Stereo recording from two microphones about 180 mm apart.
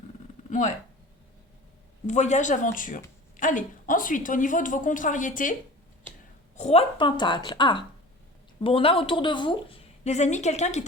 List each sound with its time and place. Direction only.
2.0 s a woman's voice: 40° left (ahead or behind)
6.6 s a woman's voice: 35° left (ahead or behind)